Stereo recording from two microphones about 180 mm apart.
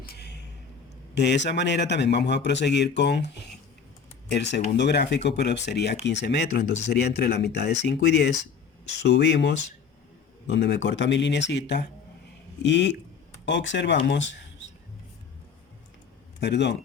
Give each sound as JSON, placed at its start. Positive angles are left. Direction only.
{"t": 0.0, "sound": "music", "side_deg": 65}
{"t": 1.1, "sound": "speech", "side_deg": 75}
{"t": 4.3, "sound": "speech", "side_deg": 70}
{"t": 10.8, "sound": "speech", "side_deg": 85}
{"t": 16.4, "sound": "speech", "side_deg": 75}